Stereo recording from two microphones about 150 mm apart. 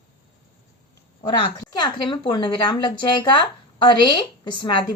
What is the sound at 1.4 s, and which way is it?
A woman's voice, 30° left (ahead or behind).